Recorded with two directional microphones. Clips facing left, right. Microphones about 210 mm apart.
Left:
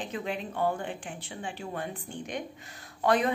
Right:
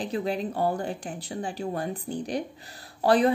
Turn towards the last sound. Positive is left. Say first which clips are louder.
# right 5 dB
turn(degrees=-35)  # may be behind; listen again after turning